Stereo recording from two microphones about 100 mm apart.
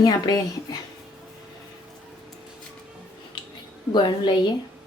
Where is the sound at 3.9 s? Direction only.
50° left (ahead or behind).